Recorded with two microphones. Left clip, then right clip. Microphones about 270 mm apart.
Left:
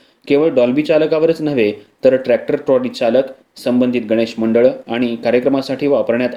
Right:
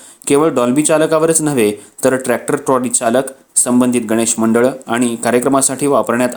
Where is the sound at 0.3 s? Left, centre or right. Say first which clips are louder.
Even; right.